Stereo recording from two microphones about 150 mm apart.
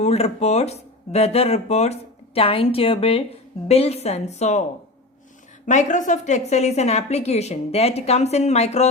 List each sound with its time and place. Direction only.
0.0 s speech: 45° left (ahead or behind)
5.6 s speech: 55° left (ahead or behind)